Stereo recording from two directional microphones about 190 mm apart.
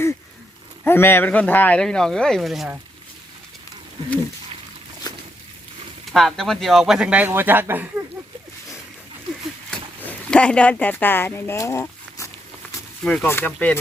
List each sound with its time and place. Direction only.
0.9 s speech: 10° left (ahead or behind)
5.1 s a sound: 20° left (ahead or behind)
6.1 s speech: centre (ahead or behind)
9.6 s speech: 5° left (ahead or behind)